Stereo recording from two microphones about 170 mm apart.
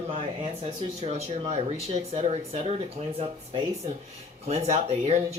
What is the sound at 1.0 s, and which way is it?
Speech, 40° right (ahead or behind).